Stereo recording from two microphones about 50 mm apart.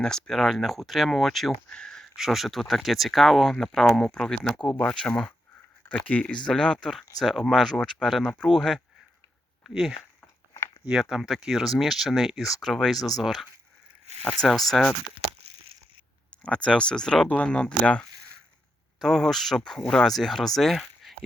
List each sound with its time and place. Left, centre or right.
0.0 s speech: centre
1.7 s a sound: centre
2.1 s speech: centre
6.1 s speech: left
6.3 s speech: centre
8.0 s speech: centre
10.8 s speech: centre
16.4 s speech: centre
19.0 s speech: centre